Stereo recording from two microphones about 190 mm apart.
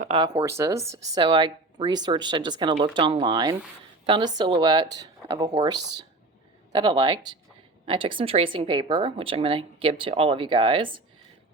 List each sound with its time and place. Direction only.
0.1 s speech: 30° right (ahead or behind)
0.4 s speech: 15° right (ahead or behind)